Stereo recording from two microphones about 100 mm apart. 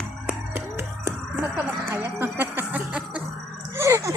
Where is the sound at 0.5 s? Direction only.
30° right (ahead or behind).